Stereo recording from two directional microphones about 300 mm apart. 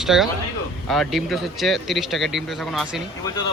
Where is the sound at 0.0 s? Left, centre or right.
Centre.